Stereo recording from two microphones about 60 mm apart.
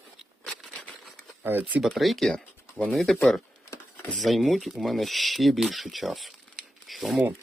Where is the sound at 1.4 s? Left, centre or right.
Right.